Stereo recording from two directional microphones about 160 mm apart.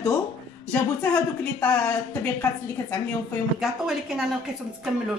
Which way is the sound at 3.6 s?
5° right (ahead or behind).